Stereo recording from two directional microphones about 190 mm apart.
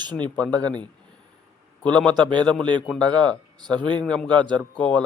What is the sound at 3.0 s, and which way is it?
Speech, 20° right (ahead or behind).